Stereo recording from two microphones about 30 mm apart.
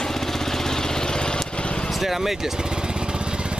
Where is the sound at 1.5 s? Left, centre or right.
Left.